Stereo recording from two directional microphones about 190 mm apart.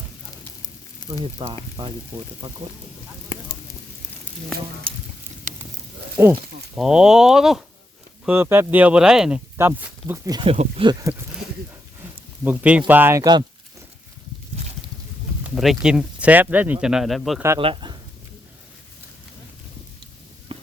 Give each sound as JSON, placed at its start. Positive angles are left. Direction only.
{"t": 1.1, "sound": "speech", "side_deg": -25}
{"t": 4.9, "sound": "speech", "side_deg": -30}
{"t": 6.2, "sound": "speech", "side_deg": -10}
{"t": 10.3, "sound": "speech", "side_deg": -30}
{"t": 11.0, "sound": "a sound", "side_deg": -10}
{"t": 12.5, "sound": "speech", "side_deg": -5}
{"t": 15.4, "sound": "speech", "side_deg": 0}
{"t": 17.6, "sound": "speech", "side_deg": -25}
{"t": 20.5, "sound": "walk", "side_deg": -30}